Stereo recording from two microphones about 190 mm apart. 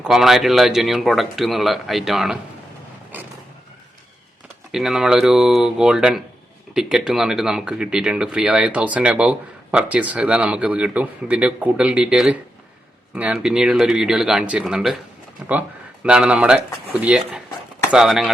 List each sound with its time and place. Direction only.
0.0 s speech: centre (ahead or behind)
4.7 s speech: centre (ahead or behind)